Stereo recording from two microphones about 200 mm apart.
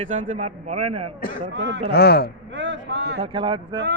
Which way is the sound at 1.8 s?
50° left (ahead or behind).